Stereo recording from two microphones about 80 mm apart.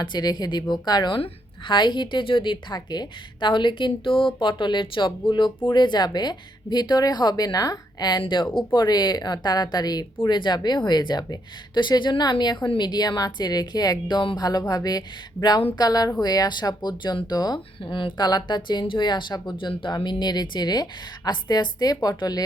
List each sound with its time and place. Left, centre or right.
0.0 s speech: left
1.6 s a woman's voice: left
5.6 s speech: left
10.2 s speech: left